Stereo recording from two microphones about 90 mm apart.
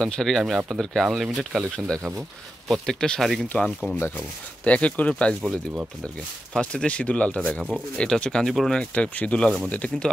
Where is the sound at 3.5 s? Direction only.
15° left (ahead or behind).